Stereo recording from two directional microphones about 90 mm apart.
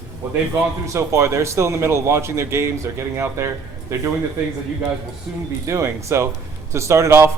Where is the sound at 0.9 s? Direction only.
30° right (ahead or behind).